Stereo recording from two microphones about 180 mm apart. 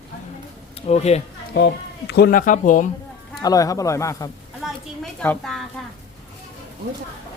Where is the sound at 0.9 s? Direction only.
35° left (ahead or behind).